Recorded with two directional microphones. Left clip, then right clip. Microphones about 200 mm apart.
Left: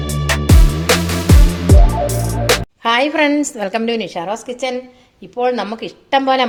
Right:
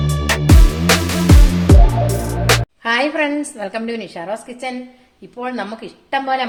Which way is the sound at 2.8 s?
35° left (ahead or behind).